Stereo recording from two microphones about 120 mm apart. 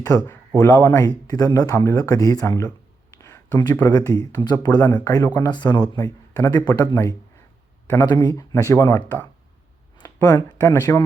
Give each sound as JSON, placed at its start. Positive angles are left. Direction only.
{"t": 0.0, "sound": "speech", "side_deg": 30}
{"t": 3.2, "sound": "a sound", "side_deg": 20}
{"t": 3.6, "sound": "speech", "side_deg": 35}
{"t": 10.2, "sound": "speech", "side_deg": 15}